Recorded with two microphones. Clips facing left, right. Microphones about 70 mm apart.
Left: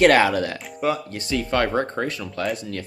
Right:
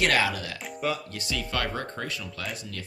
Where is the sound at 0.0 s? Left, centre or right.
Left.